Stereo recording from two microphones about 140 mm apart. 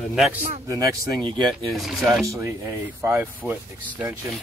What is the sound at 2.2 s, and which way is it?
Speech, 20° right (ahead or behind).